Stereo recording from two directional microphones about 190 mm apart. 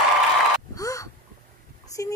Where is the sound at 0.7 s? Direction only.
15° left (ahead or behind).